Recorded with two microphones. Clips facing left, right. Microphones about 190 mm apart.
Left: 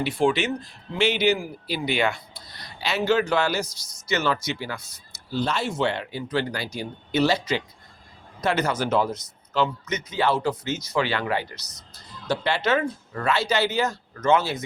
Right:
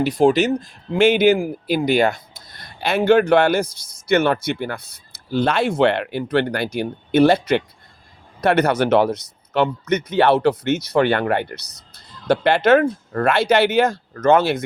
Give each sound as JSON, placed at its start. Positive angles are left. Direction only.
{"t": 0.0, "sound": "speech", "side_deg": -40}